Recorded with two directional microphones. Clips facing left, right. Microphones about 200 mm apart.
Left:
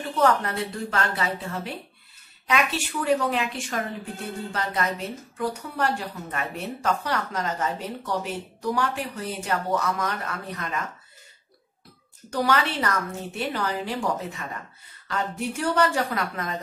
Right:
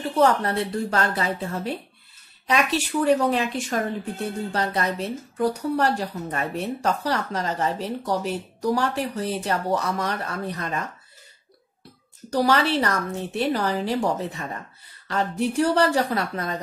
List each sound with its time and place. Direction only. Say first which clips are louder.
0.2 s speech: right 2 dB; 35° right (ahead or behind)
12.3 s speech: right 4 dB; 35° right (ahead or behind)